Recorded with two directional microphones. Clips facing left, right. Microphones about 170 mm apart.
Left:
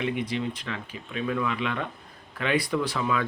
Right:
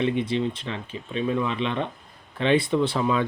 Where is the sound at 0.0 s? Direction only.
25° right (ahead or behind).